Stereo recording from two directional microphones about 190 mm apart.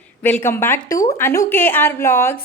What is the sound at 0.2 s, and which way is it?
A woman's voice, 10° left (ahead or behind).